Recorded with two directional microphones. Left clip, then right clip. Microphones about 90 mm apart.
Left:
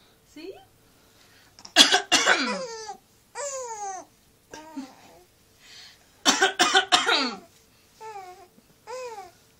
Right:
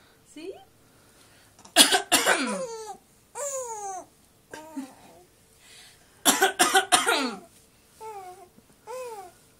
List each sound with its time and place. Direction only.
0.4 s a woman's voice: centre (ahead or behind)
1.7 s cough: centre (ahead or behind)
2.5 s a sound: 20° right (ahead or behind)
3.8 s cat: 15° left (ahead or behind)
4.7 s a sound: centre (ahead or behind)
5.8 s cough: centre (ahead or behind)
8.0 s babbling: 15° right (ahead or behind)